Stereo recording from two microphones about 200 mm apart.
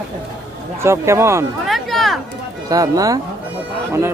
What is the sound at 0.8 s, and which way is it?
Speech, 15° right (ahead or behind).